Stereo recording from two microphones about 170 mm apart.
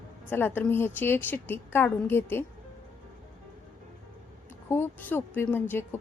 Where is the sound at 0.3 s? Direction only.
10° left (ahead or behind).